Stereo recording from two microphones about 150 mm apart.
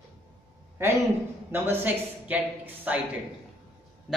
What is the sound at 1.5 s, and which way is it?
A man's voice, 15° right (ahead or behind).